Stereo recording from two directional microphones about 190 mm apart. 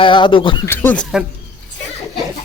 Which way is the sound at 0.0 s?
25° left (ahead or behind).